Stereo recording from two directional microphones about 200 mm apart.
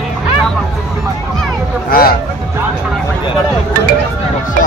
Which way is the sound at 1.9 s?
45° left (ahead or behind).